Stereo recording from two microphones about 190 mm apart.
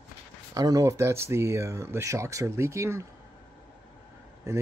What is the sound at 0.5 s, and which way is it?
Speech, 20° right (ahead or behind).